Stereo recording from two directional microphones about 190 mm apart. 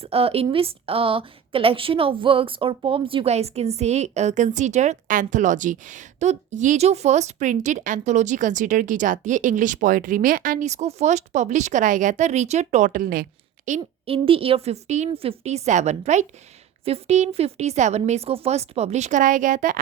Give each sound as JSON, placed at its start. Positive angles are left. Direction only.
{"t": 0.0, "sound": "a woman's voice", "side_deg": -30}
{"t": 13.7, "sound": "a woman's voice", "side_deg": -35}